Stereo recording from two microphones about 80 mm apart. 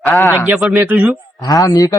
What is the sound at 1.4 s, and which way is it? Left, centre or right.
Speech, left.